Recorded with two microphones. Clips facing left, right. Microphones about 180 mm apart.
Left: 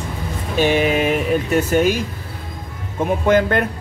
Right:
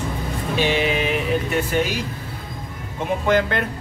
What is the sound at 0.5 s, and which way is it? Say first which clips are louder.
Speech: left 4 dB; 50° left (ahead or behind).